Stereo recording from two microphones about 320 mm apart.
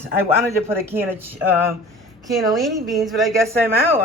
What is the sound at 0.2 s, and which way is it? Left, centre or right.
Speech, centre.